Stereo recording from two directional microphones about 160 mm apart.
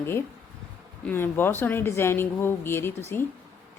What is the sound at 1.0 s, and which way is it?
A woman's voice, 15° left (ahead or behind).